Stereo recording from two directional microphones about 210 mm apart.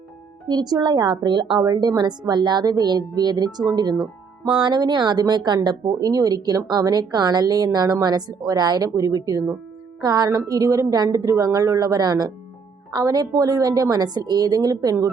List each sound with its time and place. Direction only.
0.4 s a woman's voice: 20° right (ahead or behind)